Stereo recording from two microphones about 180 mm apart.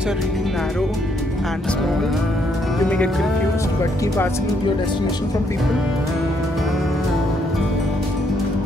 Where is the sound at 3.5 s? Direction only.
15° left (ahead or behind).